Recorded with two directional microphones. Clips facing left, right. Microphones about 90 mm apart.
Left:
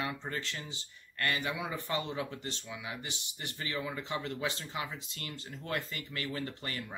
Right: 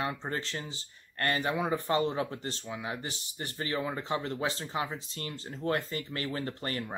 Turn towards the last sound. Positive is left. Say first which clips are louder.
# right 5 dB
turn(degrees=-40)  # may be behind; listen again after turning